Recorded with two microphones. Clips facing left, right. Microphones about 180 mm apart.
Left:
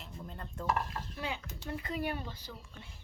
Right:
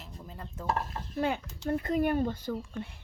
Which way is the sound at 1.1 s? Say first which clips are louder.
Right 12 dB; 50° right (ahead or behind).